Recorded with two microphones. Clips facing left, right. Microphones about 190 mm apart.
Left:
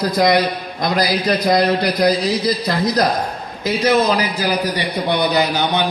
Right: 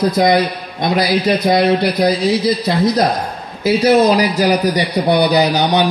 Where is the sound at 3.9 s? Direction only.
40° right (ahead or behind).